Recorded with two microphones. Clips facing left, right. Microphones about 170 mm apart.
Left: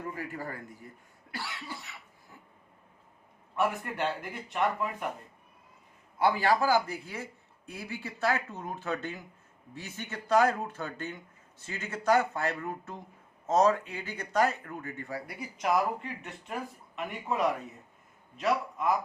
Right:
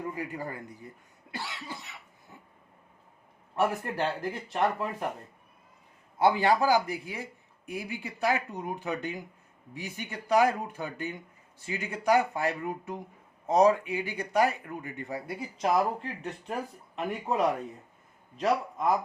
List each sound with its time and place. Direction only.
0.2 s speech: 20° right (ahead or behind)
1.3 s cough: 20° right (ahead or behind)
3.5 s speech: 35° right (ahead or behind)
6.1 s speech: 20° right (ahead or behind)